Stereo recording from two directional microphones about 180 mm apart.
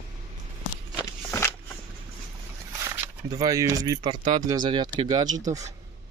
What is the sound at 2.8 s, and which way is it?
Speech, 20° right (ahead or behind).